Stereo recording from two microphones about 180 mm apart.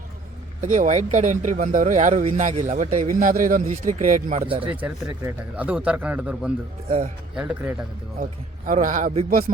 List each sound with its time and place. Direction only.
0.6 s speech: 40° right (ahead or behind)
4.6 s speech: 10° right (ahead or behind)
6.8 s speech: 35° right (ahead or behind)
7.3 s a man's voice: 5° right (ahead or behind)
8.2 s speech: 45° right (ahead or behind)